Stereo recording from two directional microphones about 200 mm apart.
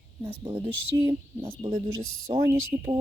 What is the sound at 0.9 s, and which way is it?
Speech, 15° right (ahead or behind).